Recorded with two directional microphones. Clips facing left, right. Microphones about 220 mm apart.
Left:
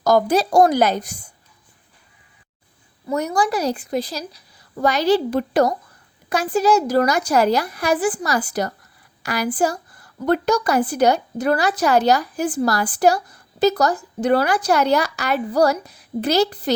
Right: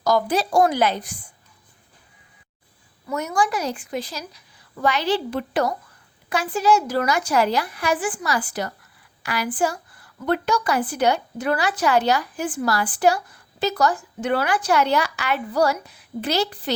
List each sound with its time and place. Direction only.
0.0 s a woman's voice: 45° left (ahead or behind)
3.1 s a woman's voice: 35° left (ahead or behind)